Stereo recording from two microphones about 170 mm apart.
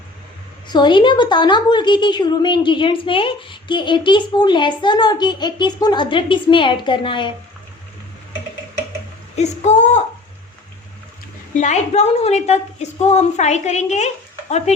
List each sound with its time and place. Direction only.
0.7 s a woman's voice: 25° left (ahead or behind)
9.3 s speech: 40° left (ahead or behind)
11.5 s a woman's voice: 45° left (ahead or behind)